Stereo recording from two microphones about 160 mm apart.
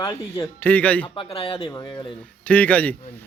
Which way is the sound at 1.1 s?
35° left (ahead or behind).